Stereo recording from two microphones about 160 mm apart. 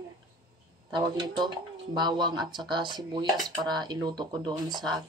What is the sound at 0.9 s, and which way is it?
Speech, 30° right (ahead or behind).